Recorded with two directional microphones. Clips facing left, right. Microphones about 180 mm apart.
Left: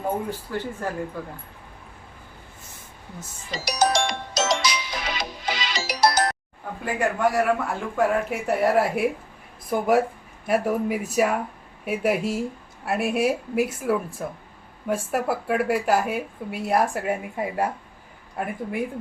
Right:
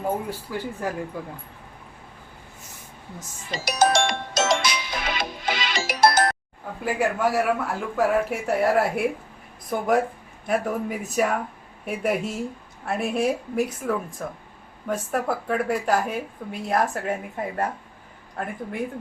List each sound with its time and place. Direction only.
0.3 s speech: 10° right (ahead or behind)
3.5 s music: 55° right (ahead or behind)
6.8 s a woman's voice: 5° right (ahead or behind)